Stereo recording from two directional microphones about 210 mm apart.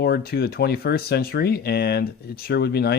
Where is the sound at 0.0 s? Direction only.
50° left (ahead or behind).